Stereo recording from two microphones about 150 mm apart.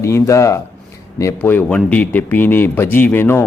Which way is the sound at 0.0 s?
20° left (ahead or behind).